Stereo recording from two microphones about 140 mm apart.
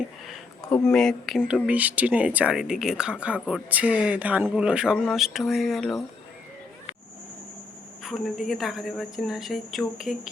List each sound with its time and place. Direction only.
0.3 s speech: 5° left (ahead or behind)
1.6 s a woman's voice: 10° right (ahead or behind)
8.0 s a woman's voice: centre (ahead or behind)